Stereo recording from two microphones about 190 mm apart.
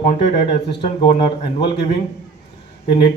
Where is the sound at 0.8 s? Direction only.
35° left (ahead or behind).